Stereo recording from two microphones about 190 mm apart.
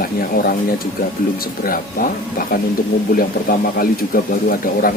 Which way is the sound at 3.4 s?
50° left (ahead or behind).